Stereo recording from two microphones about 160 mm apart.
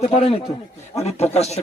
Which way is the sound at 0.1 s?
40° left (ahead or behind).